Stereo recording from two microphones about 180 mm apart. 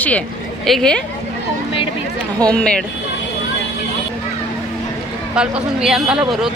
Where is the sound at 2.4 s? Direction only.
5° left (ahead or behind).